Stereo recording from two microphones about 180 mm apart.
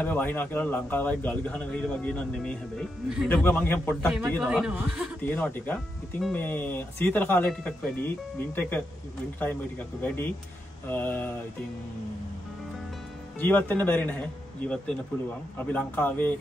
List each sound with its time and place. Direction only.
0.0 s a man's voice: 10° left (ahead or behind)
4.4 s speech: 5° right (ahead or behind)
5.2 s a man's voice: 10° left (ahead or behind)
13.4 s a man's voice: 10° left (ahead or behind)
15.5 s a man's voice: 10° left (ahead or behind)